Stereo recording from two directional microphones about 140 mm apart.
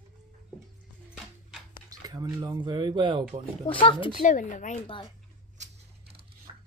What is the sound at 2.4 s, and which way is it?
Speech, 30° right (ahead or behind).